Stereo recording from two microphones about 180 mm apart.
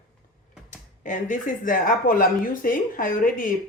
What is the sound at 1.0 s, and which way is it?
Speech, 45° left (ahead or behind).